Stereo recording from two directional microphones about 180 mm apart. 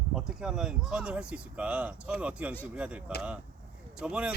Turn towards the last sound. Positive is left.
turn(degrees=-5)  # may be behind; listen again after turning